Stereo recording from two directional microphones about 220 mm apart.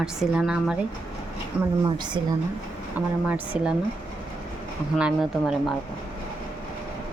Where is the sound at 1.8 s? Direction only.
20° right (ahead or behind).